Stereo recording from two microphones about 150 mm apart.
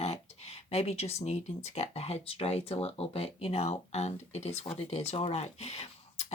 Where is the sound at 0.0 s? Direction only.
45° left (ahead or behind).